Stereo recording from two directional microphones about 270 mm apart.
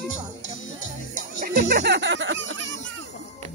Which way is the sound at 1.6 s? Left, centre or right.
Right.